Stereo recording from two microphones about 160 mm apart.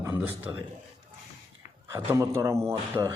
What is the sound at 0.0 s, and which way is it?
Speech, 15° right (ahead or behind).